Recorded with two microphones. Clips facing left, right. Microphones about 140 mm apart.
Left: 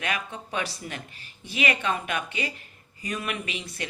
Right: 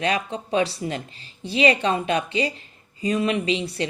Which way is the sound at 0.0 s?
30° right (ahead or behind).